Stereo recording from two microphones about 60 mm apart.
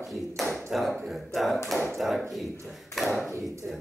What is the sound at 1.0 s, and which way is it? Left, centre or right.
Speech, centre.